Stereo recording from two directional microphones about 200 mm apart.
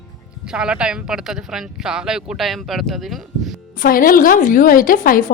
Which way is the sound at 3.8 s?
45° left (ahead or behind).